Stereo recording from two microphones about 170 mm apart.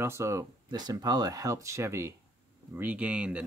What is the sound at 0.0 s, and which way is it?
Speech, 15° right (ahead or behind).